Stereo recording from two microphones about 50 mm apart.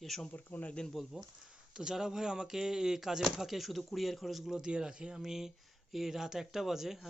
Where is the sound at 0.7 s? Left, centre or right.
Centre.